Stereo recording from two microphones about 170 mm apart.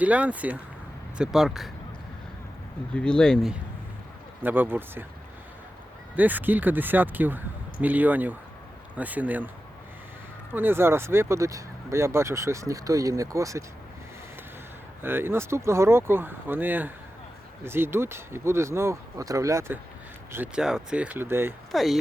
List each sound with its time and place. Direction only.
0.0 s speech: 10° right (ahead or behind)
2.9 s speech: 5° left (ahead or behind)
4.4 s speech: 10° right (ahead or behind)
6.1 s speech: 10° right (ahead or behind)
10.5 s speech: 10° right (ahead or behind)
15.0 s speech: 15° right (ahead or behind)
21.7 s speech: centre (ahead or behind)